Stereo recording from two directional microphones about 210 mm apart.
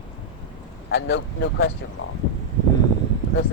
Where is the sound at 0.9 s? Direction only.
55° left (ahead or behind).